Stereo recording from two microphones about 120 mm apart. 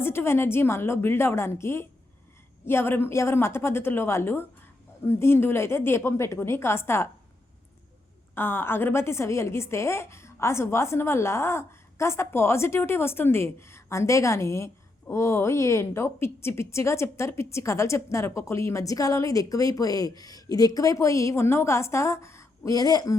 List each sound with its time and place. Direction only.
0.0 s a woman's voice: 20° left (ahead or behind)
8.4 s a woman's voice: 20° left (ahead or behind); by 23.1 s 35° left (ahead or behind)